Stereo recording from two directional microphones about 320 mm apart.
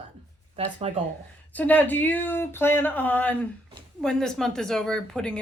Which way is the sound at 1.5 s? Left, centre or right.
Centre.